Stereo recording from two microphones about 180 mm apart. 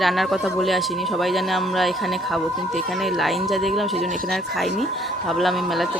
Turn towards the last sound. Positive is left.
turn(degrees=0)  # may be behind; listen again after turning